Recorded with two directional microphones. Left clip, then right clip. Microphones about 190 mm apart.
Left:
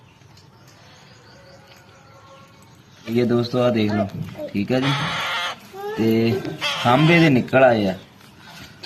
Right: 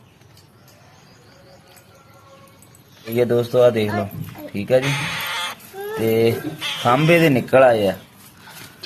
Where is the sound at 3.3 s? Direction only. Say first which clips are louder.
Right 6 dB; 15° right (ahead or behind).